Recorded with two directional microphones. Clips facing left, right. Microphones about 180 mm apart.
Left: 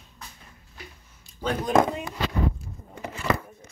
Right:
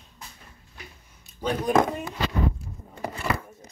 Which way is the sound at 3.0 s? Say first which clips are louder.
Left 1 dB; 35° right (ahead or behind).